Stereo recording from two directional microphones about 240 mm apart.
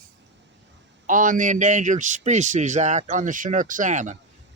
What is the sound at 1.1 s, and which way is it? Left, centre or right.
Speech, right.